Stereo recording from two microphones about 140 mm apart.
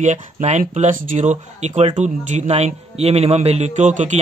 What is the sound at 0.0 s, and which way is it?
A man's voice, 55° right (ahead or behind).